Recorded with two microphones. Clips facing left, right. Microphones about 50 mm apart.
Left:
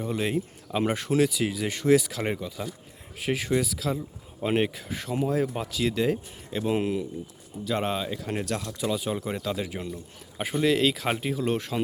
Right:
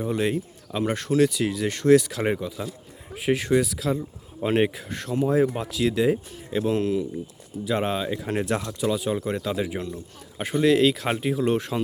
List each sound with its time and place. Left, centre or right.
0.0 s speech: centre
0.3 s speech: centre
6.7 s speech: centre
7.6 s speech: centre
8.2 s speech: centre
8.8 s speech: centre